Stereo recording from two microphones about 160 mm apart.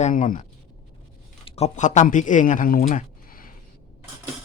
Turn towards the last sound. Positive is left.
turn(degrees=60)  # may be behind; listen again after turning